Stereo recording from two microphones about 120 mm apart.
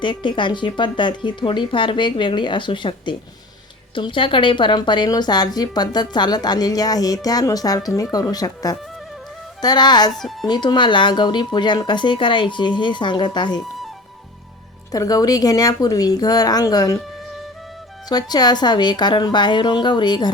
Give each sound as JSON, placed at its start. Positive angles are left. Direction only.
{"t": 0.0, "sound": "a woman's voice", "side_deg": 40}
{"t": 14.9, "sound": "a woman's voice", "side_deg": 30}
{"t": 18.1, "sound": "a woman's voice", "side_deg": 35}